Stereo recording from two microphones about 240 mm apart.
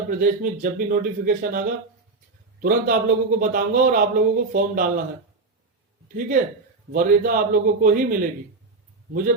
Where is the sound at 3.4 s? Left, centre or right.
Right.